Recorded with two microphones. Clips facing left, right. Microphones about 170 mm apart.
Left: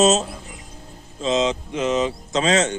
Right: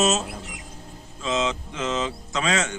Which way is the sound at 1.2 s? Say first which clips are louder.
Left 5 dB; 20° left (ahead or behind).